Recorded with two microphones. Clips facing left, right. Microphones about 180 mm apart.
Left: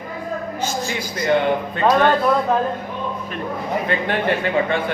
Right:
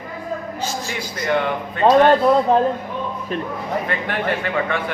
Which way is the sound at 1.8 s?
25° right (ahead or behind).